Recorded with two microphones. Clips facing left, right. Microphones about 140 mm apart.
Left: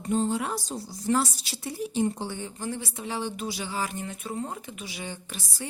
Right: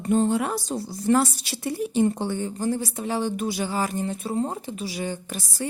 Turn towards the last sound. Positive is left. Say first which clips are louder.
# right 7 dB
turn(degrees=-45)  # may be behind; listen again after turning